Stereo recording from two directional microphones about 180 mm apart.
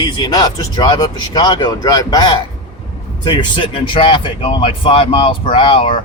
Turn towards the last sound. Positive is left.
turn(degrees=30)  # may be behind; listen again after turning